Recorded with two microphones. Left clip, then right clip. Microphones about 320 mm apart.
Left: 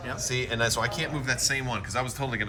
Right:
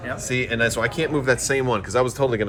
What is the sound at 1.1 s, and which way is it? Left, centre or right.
Speech, centre.